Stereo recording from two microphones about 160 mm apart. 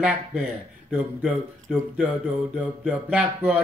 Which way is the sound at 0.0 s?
10° right (ahead or behind).